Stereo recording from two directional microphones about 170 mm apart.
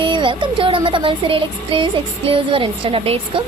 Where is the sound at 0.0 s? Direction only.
30° right (ahead or behind).